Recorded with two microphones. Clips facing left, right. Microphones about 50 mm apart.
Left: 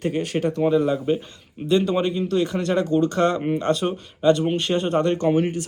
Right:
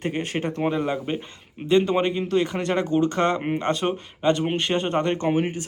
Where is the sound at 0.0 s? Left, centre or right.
Right.